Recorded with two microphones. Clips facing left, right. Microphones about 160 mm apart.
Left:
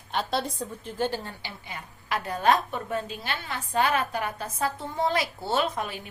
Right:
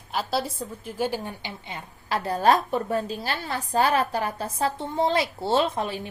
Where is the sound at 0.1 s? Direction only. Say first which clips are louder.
Right 1 dB; 5° right (ahead or behind).